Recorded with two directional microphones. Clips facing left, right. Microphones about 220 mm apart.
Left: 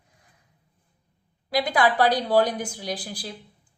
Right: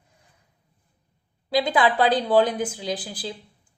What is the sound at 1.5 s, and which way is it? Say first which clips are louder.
A woman's voice: right 1 dB; 25° right (ahead or behind).